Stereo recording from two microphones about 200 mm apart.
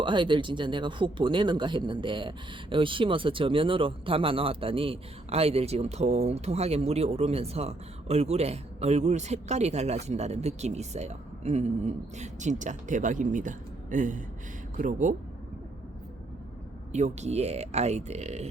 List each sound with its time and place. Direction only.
0.0 s speech: 25° right (ahead or behind); by 15.1 s 40° right (ahead or behind)
16.9 s speech: 35° right (ahead or behind)